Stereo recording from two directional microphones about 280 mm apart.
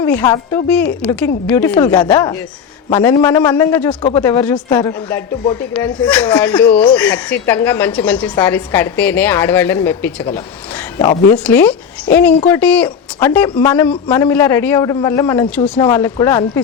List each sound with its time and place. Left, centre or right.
0.0 s speech: centre
11.3 s speech: centre